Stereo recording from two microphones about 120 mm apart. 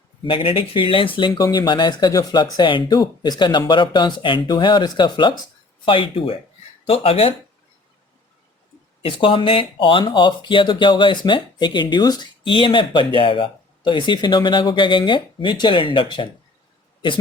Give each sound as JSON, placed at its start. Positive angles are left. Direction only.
{"t": 0.3, "sound": "speech", "side_deg": 50}
{"t": 9.0, "sound": "speech", "side_deg": 45}